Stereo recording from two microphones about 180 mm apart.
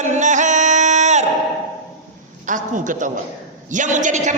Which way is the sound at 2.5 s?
45° right (ahead or behind).